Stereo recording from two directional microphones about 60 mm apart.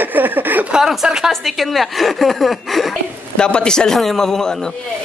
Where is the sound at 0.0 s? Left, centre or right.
Right.